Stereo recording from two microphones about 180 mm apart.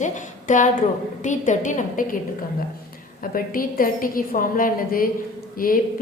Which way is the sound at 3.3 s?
50° left (ahead or behind).